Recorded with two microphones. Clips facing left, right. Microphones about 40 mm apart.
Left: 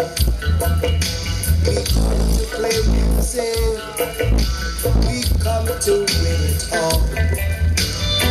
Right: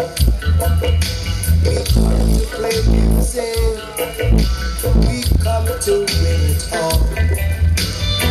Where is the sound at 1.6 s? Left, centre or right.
Right.